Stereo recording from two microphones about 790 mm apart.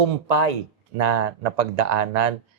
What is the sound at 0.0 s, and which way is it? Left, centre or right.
Speech, right.